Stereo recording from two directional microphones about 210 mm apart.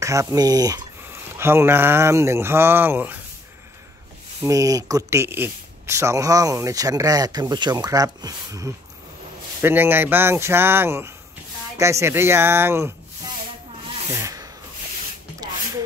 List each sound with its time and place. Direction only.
0.0 s speech: 15° right (ahead or behind)
4.5 s speech: 15° right (ahead or behind)
14.1 s rub: 15° right (ahead or behind)